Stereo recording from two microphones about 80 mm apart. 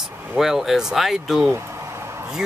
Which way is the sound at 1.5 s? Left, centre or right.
Right.